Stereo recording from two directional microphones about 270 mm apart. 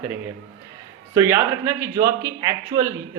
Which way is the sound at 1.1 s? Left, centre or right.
Centre.